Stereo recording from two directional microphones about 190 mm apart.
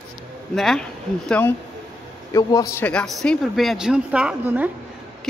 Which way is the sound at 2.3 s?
15° left (ahead or behind).